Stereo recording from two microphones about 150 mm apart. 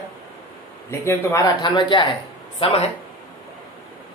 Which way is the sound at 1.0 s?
15° left (ahead or behind).